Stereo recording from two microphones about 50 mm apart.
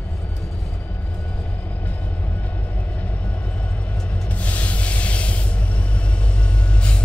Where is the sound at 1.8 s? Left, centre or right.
Left.